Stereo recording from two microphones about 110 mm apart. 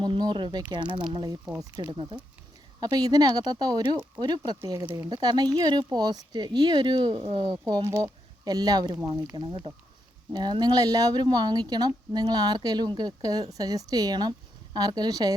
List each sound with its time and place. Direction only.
0.0 s speech: 45° right (ahead or behind)
2.8 s speech: 35° right (ahead or behind)
4.6 s speech: 25° right (ahead or behind); by 7.2 s 45° right (ahead or behind)
7.2 s speech: 60° right (ahead or behind)
7.6 s speech: 35° right (ahead or behind)